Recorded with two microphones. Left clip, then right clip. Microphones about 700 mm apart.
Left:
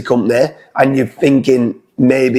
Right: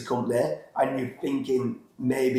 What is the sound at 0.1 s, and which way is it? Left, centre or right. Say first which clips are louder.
Speech: left 12 dB; left.